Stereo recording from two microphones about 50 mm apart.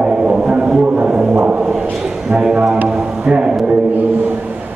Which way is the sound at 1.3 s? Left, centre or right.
Right.